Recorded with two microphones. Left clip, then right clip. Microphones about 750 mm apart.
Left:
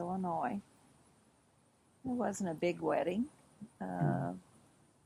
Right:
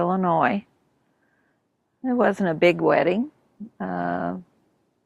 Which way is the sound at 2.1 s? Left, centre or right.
Right.